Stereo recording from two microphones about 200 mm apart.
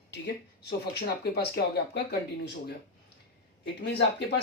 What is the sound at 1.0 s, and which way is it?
Speech, 55° left (ahead or behind).